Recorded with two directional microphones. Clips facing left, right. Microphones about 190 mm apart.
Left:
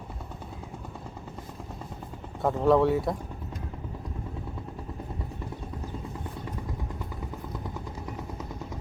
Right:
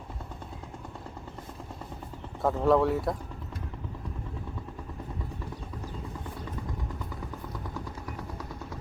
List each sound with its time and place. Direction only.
2.4 s speech: centre (ahead or behind)
7.6 s vehicle: 20° left (ahead or behind)